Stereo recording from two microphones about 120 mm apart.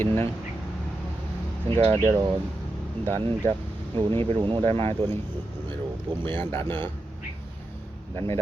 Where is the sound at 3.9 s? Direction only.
50° right (ahead or behind).